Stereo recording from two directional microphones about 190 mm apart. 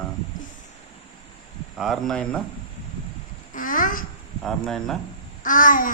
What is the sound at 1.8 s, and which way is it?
Speech, centre (ahead or behind).